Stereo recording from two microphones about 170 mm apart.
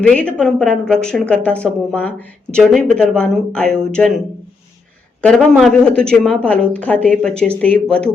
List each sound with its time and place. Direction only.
0.0 s a woman's voice: 5° left (ahead or behind)
5.2 s a woman's voice: 5° left (ahead or behind)